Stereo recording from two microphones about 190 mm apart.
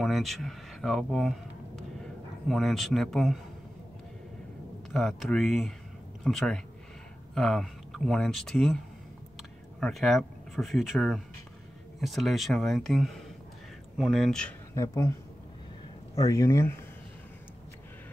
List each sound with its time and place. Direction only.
0.0 s speech: centre (ahead or behind)
2.4 s speech: centre (ahead or behind)
4.9 s speech: centre (ahead or behind)
14.7 s speech: 15° left (ahead or behind)
16.2 s speech: 15° left (ahead or behind)